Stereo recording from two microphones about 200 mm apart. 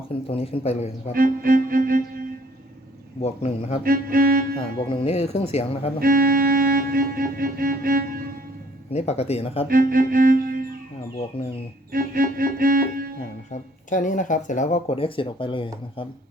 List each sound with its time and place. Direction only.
0.1 s speech: 30° left (ahead or behind)
1.1 s music: 45° right (ahead or behind)
3.2 s speech: 30° left (ahead or behind)
3.8 s music: 45° right (ahead or behind)
4.9 s speech: 30° left (ahead or behind)
6.0 s music: 45° right (ahead or behind)
8.9 s speech: 35° left (ahead or behind)
9.6 s music: 45° right (ahead or behind)
11.9 s music: 45° right (ahead or behind)
13.5 s speech: 40° left (ahead or behind)